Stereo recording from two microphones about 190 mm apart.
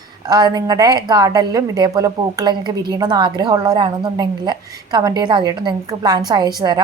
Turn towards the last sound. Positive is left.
turn(degrees=-20)  # may be behind; listen again after turning